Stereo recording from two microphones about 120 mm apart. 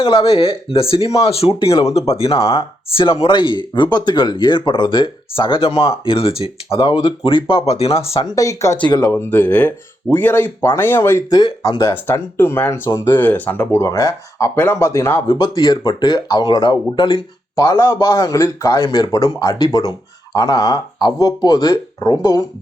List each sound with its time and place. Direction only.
0.0 s speech: 50° left (ahead or behind)
8.2 s speech: 30° left (ahead or behind)
8.8 s speech: 35° left (ahead or behind)
9.1 s speech: 15° left (ahead or behind)
11.3 s speech: 35° left (ahead or behind)